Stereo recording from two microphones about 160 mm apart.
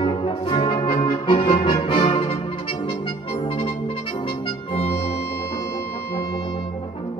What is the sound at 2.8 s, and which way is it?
Music, 35° left (ahead or behind).